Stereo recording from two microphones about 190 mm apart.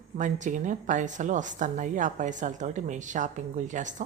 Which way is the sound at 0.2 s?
40° right (ahead or behind).